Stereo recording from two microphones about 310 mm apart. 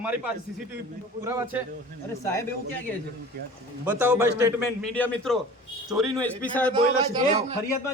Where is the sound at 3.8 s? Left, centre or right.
Centre.